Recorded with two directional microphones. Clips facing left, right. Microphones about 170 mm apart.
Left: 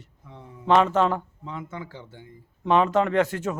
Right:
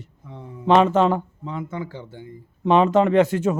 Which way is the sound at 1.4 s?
30° right (ahead or behind).